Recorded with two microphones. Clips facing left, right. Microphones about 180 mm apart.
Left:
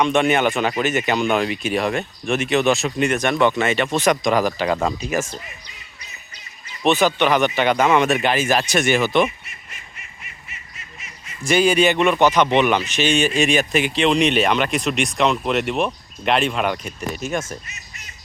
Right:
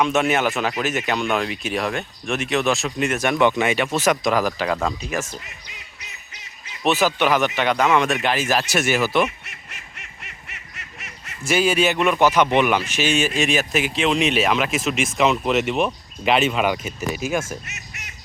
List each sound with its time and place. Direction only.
0.0 s speech: 5° right (ahead or behind)
6.8 s speech: 5° right (ahead or behind)
9.4 s honk: 70° right (ahead or behind)
11.4 s speech: 5° right (ahead or behind)
17.7 s quack: 75° right (ahead or behind)